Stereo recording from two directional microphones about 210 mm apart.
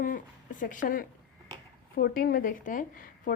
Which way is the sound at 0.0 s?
40° left (ahead or behind).